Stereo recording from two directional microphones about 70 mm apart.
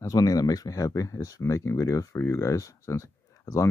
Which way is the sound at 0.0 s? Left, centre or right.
Left.